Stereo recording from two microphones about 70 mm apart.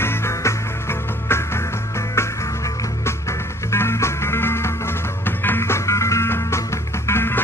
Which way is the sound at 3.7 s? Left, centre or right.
Left.